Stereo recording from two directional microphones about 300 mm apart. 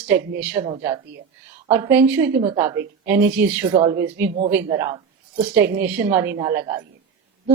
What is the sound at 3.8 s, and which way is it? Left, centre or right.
Speech, centre.